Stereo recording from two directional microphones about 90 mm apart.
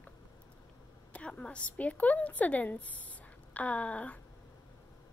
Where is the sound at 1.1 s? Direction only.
15° left (ahead or behind).